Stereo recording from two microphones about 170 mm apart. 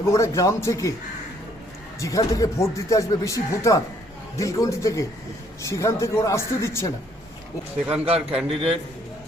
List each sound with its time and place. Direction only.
0.0 s speech: 15° left (ahead or behind)
2.0 s speech: 20° left (ahead or behind)
8.0 s a man's voice: 35° right (ahead or behind)